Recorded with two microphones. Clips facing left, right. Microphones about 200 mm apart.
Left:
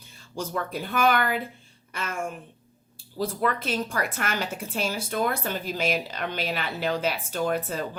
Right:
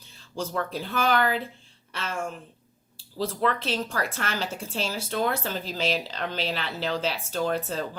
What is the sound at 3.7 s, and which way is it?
Speech, 15° left (ahead or behind).